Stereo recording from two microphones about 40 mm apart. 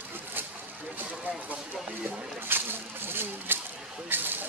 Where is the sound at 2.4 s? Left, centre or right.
Right.